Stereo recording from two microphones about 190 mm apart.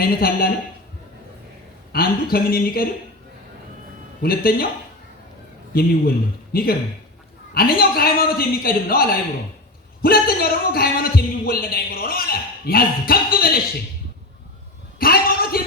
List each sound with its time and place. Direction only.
0.0 s a man's voice: 50° left (ahead or behind)
1.9 s a man's voice: 50° left (ahead or behind)
4.2 s a man's voice: 50° left (ahead or behind)
5.7 s a man's voice: 50° left (ahead or behind)
14.9 s a sound: 50° left (ahead or behind)